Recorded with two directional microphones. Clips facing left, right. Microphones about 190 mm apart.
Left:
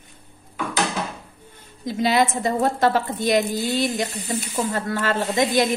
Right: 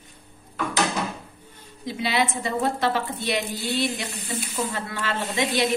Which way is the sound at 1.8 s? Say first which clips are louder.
Left 5 dB; 45° left (ahead or behind).